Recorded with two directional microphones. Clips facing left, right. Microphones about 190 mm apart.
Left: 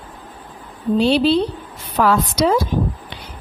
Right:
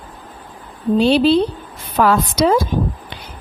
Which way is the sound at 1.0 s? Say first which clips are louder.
Right 2 dB; 50° right (ahead or behind).